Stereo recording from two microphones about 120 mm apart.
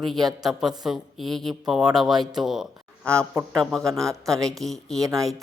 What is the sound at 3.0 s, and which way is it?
Speech, 25° right (ahead or behind).